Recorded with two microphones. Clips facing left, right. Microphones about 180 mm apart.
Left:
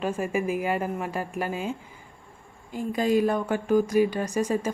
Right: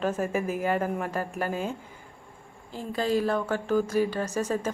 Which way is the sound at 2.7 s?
15° left (ahead or behind).